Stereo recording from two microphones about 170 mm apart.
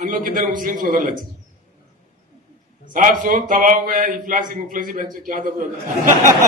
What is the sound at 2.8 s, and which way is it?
A man's voice, 50° right (ahead or behind).